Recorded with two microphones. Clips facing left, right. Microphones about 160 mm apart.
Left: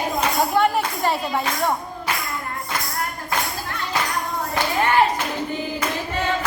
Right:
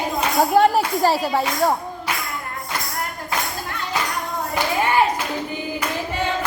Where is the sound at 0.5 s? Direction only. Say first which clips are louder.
Right 6 dB; 35° right (ahead or behind).